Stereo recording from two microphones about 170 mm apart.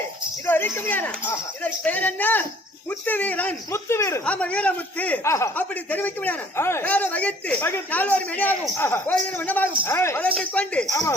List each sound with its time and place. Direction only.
0.4 s a man's voice: 10° left (ahead or behind)
10.8 s speech: 20° left (ahead or behind)